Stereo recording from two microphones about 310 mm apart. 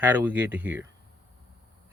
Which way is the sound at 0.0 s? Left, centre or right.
Centre.